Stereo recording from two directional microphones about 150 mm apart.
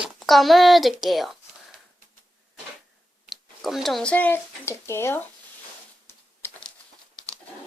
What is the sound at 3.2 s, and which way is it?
Speech, centre (ahead or behind).